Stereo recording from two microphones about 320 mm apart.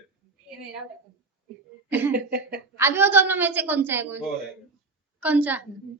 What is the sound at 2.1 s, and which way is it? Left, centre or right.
Speech, right.